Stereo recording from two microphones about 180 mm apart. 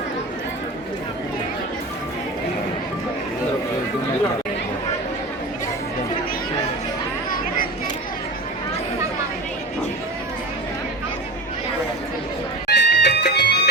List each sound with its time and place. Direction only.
12.6 s music: 70° left (ahead or behind)